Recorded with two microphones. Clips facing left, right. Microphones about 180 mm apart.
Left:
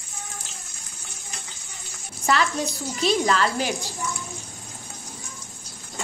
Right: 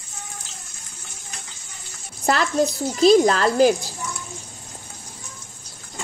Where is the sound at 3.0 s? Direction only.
40° right (ahead or behind).